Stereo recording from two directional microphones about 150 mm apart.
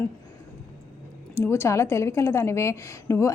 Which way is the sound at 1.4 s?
15° left (ahead or behind).